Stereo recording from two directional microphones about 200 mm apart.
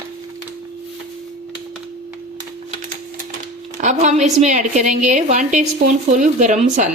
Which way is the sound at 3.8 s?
35° right (ahead or behind).